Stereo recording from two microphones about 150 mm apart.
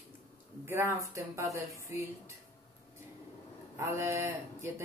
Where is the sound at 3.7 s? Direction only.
20° right (ahead or behind).